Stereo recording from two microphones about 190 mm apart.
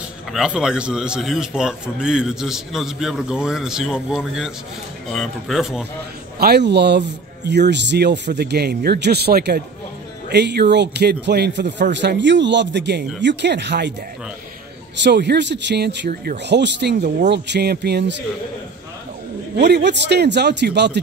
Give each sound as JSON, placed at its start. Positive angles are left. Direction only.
{"t": 0.3, "sound": "a man's voice", "side_deg": -5}
{"t": 6.4, "sound": "speech", "side_deg": -60}
{"t": 15.0, "sound": "speech", "side_deg": -60}
{"t": 19.5, "sound": "speech", "side_deg": -60}